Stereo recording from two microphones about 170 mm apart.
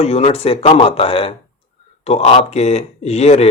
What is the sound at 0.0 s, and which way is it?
Speech, 35° left (ahead or behind).